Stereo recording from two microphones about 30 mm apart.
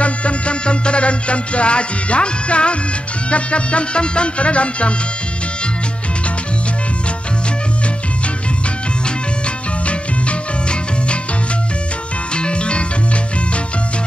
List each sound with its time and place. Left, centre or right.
0.0 s music: left
9.8 s music: left
12.4 s music: left